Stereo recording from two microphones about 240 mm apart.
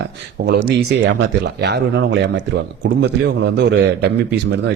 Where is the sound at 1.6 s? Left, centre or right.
Right.